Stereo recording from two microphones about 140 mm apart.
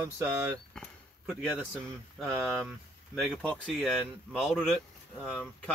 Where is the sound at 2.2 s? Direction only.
Centre (ahead or behind).